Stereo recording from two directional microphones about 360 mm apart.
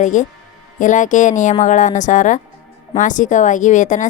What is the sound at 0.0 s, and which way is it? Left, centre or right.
A woman's voice, left.